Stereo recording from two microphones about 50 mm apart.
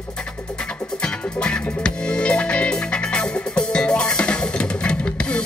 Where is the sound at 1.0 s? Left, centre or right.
Centre.